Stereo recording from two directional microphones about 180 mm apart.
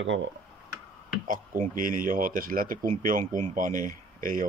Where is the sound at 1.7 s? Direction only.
50° right (ahead or behind).